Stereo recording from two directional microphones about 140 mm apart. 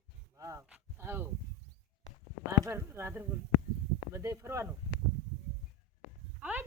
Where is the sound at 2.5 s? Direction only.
20° right (ahead or behind).